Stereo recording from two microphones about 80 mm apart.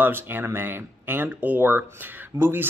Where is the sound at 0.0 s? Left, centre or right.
Right.